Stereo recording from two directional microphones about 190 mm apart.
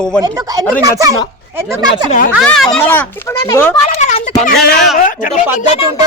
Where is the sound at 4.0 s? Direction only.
40° left (ahead or behind).